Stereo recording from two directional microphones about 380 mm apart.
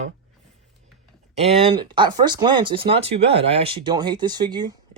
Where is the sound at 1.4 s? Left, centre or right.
Centre.